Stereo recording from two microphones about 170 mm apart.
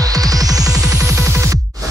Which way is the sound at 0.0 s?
20° right (ahead or behind).